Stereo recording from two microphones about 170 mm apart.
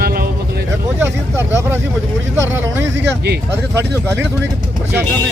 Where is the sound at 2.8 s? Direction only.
80° right.